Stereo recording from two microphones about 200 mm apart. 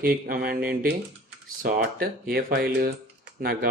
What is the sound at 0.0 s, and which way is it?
Speech, 50° right (ahead or behind).